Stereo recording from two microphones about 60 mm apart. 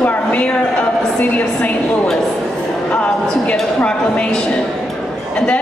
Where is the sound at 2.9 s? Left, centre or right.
Left.